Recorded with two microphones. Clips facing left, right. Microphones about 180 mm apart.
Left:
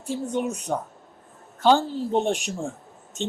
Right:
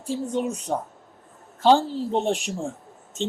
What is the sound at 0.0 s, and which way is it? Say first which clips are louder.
Speech: right 1 dB; 30° right (ahead or behind).